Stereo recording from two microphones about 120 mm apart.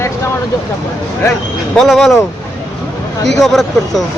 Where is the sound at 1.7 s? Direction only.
5° left (ahead or behind).